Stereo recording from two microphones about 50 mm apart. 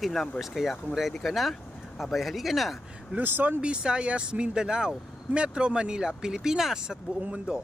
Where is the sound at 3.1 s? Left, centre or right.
Right.